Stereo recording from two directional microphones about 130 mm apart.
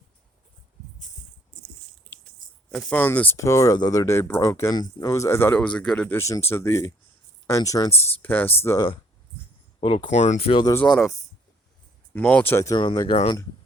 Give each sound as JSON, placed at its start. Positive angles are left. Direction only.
{"t": 2.4, "sound": "music", "side_deg": -90}
{"t": 2.7, "sound": "speech", "side_deg": 10}
{"t": 6.1, "sound": "speech", "side_deg": 20}
{"t": 8.2, "sound": "speech", "side_deg": 15}
{"t": 9.8, "sound": "speech", "side_deg": 40}
{"t": 10.1, "sound": "speech", "side_deg": 60}
{"t": 10.8, "sound": "speech", "side_deg": 0}
{"t": 12.7, "sound": "speech", "side_deg": 35}